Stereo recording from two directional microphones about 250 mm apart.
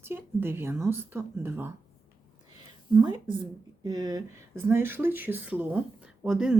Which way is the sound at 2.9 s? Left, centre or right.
Centre.